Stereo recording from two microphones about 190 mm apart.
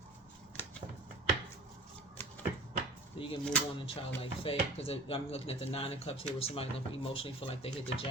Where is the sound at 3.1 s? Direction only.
25° left (ahead or behind).